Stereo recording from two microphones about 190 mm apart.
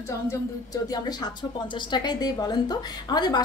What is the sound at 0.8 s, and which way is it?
Speech, 20° left (ahead or behind).